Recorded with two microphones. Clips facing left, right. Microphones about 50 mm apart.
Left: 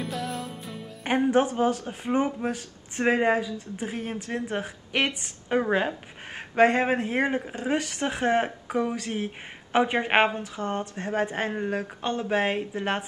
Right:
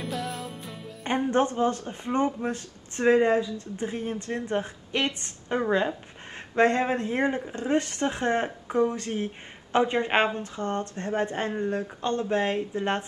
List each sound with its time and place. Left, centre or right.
0.0 s music: centre
1.0 s speech: left
10.5 s speech: centre